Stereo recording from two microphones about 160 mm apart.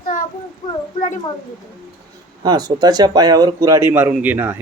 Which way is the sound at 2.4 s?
25° right (ahead or behind).